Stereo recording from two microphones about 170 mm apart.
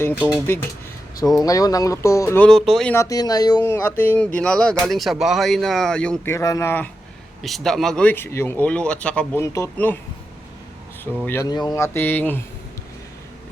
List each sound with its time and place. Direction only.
0.1 s speech: 5° right (ahead or behind)
0.4 s speech: 15° left (ahead or behind)
2.5 s speech: centre (ahead or behind)
2.9 s speech: 20° left (ahead or behind)
6.3 s speech: 15° left (ahead or behind)
11.3 s speech: 20° left (ahead or behind)